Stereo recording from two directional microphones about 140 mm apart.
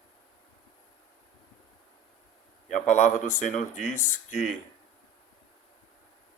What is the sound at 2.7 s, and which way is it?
Speech, 60° left (ahead or behind).